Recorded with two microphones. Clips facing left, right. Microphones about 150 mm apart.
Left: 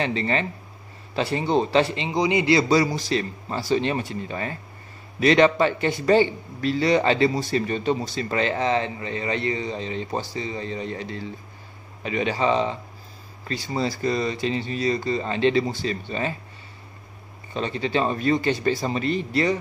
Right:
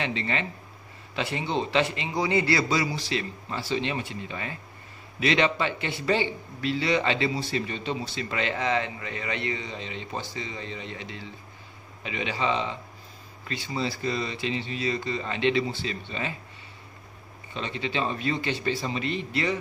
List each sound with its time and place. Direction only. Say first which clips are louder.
0.0 s speech: left 5 dB; 35° left (ahead or behind)
2.0 s a man's voice: left 4 dB; 20° left (ahead or behind)
2.7 s speech: left 7 dB; 40° left (ahead or behind)
17.6 s speech: left 6 dB; 40° left (ahead or behind)